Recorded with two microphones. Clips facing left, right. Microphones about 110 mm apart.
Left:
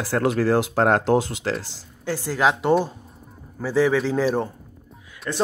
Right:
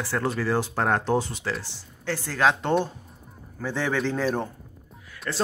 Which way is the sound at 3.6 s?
5° left (ahead or behind).